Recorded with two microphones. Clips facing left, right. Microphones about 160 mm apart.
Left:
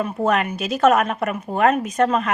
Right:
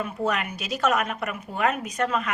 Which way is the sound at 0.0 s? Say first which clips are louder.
Left 6 dB; 50° left (ahead or behind).